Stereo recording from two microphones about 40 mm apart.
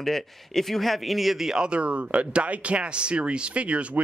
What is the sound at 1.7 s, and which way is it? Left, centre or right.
Speech, right.